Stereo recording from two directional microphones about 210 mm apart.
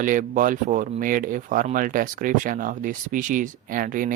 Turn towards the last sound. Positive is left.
turn(degrees=-40)  # may be behind; listen again after turning